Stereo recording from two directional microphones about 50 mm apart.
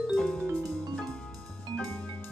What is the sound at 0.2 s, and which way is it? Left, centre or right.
Music, centre.